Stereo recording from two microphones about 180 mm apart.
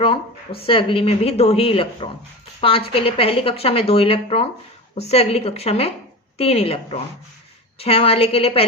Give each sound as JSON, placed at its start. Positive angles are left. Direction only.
{"t": 0.0, "sound": "speech", "side_deg": 30}